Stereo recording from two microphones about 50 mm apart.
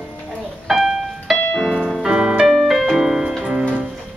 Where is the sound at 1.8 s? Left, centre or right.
Centre.